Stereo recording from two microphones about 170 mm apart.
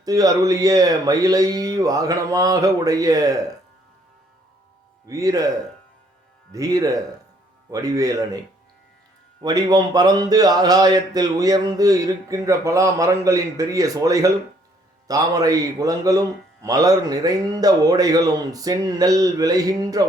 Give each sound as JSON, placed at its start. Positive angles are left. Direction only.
{"t": 0.0, "sound": "a man's voice", "side_deg": -20}
{"t": 5.0, "sound": "a man's voice", "side_deg": -20}
{"t": 6.5, "sound": "a man's voice", "side_deg": -20}
{"t": 9.4, "sound": "a man's voice", "side_deg": -25}